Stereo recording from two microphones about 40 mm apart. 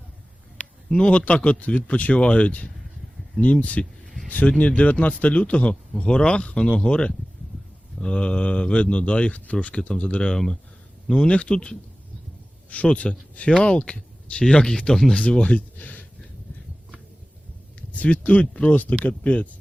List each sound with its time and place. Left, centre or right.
0.9 s speech: left
1.1 s speech: left
6.0 s speech: left
14.4 s speech: centre
15.1 s speech: left
17.7 s speech: left